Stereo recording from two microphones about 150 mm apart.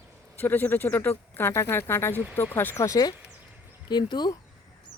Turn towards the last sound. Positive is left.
turn(degrees=30)  # may be behind; listen again after turning